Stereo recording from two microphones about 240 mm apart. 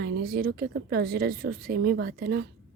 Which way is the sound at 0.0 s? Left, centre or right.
Right.